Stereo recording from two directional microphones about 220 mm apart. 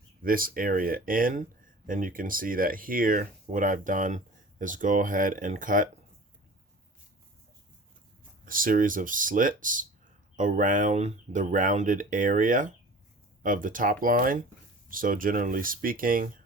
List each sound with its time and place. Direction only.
0.2 s speech: 40° right (ahead or behind)
8.4 s speech: 40° right (ahead or behind)